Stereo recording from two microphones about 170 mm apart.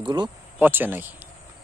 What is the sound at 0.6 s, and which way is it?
Speech, 10° right (ahead or behind).